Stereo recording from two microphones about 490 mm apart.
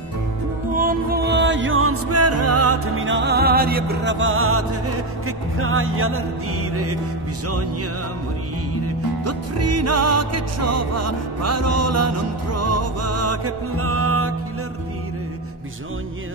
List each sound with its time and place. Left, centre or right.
0.7 s music: centre
8.8 s music: right